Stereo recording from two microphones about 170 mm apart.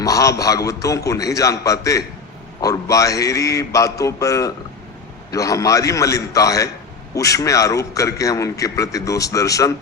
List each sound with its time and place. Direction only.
0.0 s a man's voice: 20° left (ahead or behind)